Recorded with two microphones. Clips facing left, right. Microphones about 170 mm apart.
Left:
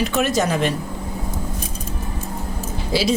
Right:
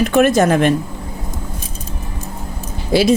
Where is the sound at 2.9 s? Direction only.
55° right (ahead or behind).